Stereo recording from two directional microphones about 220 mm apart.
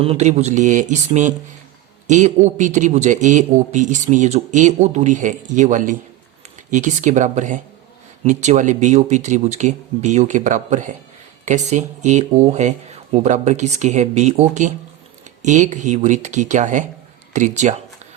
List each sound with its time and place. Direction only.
0.0 s a man's voice: 30° right (ahead or behind)